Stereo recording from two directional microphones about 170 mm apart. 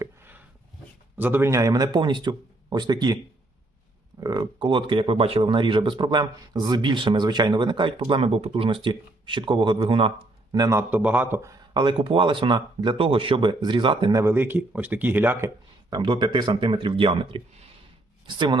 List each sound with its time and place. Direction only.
0.0 s a sound: 10° right (ahead or behind)
1.1 s speech: 10° right (ahead or behind)
4.2 s speech: 25° right (ahead or behind)
10.5 s a man's voice: 20° right (ahead or behind)
11.7 s speech: 25° right (ahead or behind)